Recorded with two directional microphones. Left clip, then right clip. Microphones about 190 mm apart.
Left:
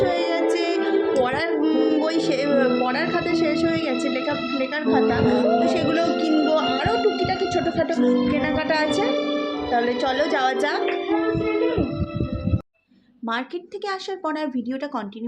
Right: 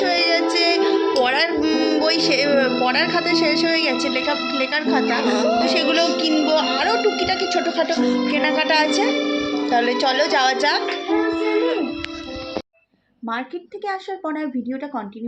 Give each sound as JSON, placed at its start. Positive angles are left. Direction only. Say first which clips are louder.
{"t": 0.0, "sound": "music", "louder": "right 3 dB", "side_deg": 20}
{"t": 4.0, "sound": "speech", "louder": "right 3 dB", "side_deg": 15}
{"t": 13.8, "sound": "speech", "louder": "right 1 dB", "side_deg": 5}